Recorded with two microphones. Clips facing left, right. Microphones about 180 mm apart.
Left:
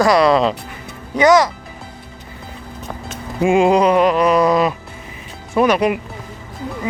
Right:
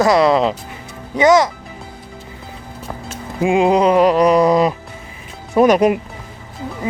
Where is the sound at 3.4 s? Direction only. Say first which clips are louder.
Even; 20° right (ahead or behind).